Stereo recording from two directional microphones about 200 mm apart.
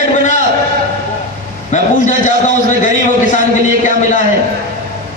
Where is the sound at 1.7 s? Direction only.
40° left (ahead or behind).